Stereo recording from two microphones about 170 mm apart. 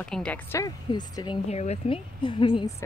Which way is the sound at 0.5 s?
20° left (ahead or behind).